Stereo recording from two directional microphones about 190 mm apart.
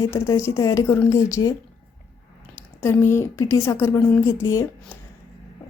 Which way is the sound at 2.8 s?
15° left (ahead or behind).